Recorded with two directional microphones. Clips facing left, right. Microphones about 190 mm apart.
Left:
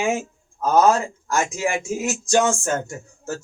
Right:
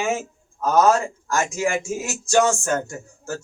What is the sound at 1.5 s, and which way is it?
Speech, 20° left (ahead or behind).